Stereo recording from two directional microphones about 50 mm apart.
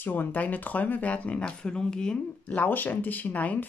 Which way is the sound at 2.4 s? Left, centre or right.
Left.